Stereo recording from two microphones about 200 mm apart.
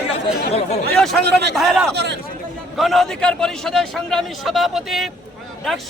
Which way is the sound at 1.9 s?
55° right (ahead or behind).